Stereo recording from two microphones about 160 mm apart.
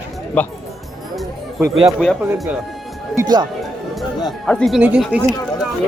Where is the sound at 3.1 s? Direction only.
20° right (ahead or behind).